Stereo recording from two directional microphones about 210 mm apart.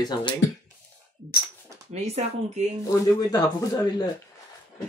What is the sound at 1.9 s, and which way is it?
Speech, 30° right (ahead or behind).